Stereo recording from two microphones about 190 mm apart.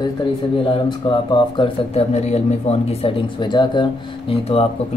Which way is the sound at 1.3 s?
30° left (ahead or behind).